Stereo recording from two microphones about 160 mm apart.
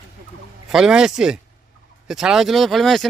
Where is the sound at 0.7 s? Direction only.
5° right (ahead or behind).